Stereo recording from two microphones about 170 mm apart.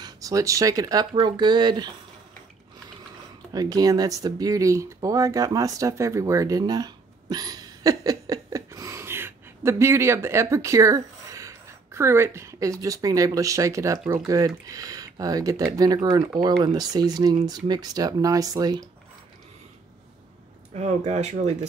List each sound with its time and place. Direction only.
0.0 s speech: 20° right (ahead or behind)
3.5 s speech: 20° right (ahead or behind)
20.7 s speech: 40° right (ahead or behind)